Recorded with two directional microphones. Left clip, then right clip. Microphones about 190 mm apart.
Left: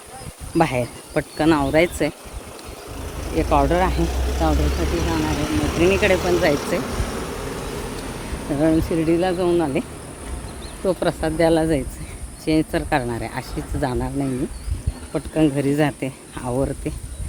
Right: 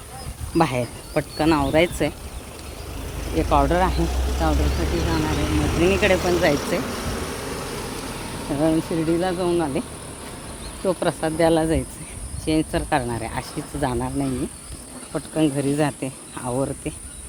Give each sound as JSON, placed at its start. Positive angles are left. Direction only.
{"t": 0.5, "sound": "speech", "side_deg": 0}
{"t": 3.5, "sound": "speech", "side_deg": 0}
{"t": 4.0, "sound": "speech", "side_deg": 35}
{"t": 6.1, "sound": "speech", "side_deg": 25}
{"t": 6.5, "sound": "vehicle", "side_deg": 10}
{"t": 8.5, "sound": "speech", "side_deg": 0}
{"t": 10.8, "sound": "speech", "side_deg": 0}
{"t": 15.1, "sound": "speech", "side_deg": 5}